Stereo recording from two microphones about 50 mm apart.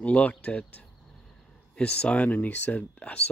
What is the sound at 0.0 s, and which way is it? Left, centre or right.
Speech, left.